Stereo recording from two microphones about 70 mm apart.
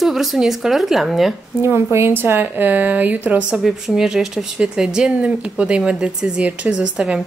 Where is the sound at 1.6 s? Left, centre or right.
Right.